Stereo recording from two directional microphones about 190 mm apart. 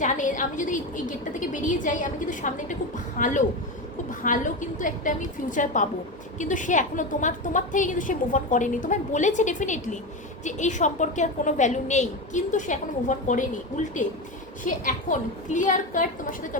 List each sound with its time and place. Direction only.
0.0 s a woman's voice: 40° left (ahead or behind)